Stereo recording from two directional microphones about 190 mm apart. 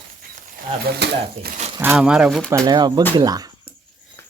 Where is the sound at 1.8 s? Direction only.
10° right (ahead or behind).